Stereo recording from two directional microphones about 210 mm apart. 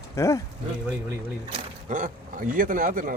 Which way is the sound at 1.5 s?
35° right (ahead or behind).